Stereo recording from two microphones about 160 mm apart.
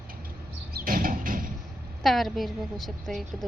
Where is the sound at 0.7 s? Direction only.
60° right (ahead or behind).